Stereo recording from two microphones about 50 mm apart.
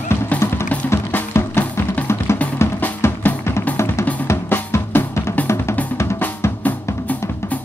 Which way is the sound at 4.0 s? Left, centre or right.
Left.